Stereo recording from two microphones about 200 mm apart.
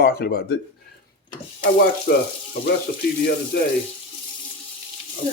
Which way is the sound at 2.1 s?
50° left (ahead or behind).